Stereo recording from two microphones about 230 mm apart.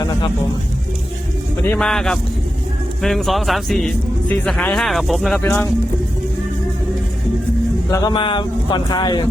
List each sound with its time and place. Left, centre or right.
0.0 s music: centre
1.6 s a man's voice: centre
7.9 s speech: centre